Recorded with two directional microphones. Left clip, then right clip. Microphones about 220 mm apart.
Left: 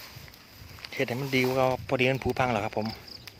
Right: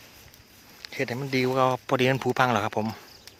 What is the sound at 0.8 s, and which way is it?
Speech, 10° right (ahead or behind).